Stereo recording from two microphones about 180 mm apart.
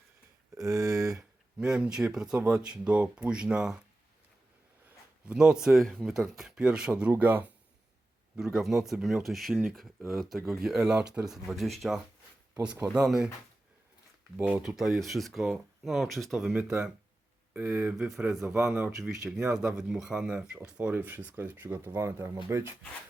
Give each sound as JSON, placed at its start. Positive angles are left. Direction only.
{"t": 0.5, "sound": "a sound", "side_deg": -20}
{"t": 1.5, "sound": "speech", "side_deg": -5}
{"t": 4.9, "sound": "speech", "side_deg": -5}
{"t": 13.1, "sound": "speech", "side_deg": -5}
{"t": 14.3, "sound": "speech", "side_deg": -5}